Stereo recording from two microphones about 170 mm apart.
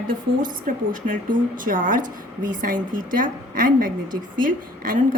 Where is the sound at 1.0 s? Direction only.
55° right (ahead or behind).